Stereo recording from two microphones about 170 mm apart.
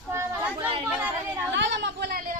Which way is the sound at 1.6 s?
90° right.